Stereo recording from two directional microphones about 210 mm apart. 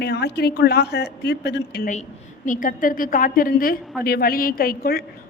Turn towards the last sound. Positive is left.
turn(degrees=45)  # may be behind; listen again after turning